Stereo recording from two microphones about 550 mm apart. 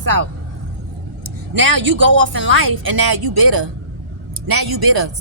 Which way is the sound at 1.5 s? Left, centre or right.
Right.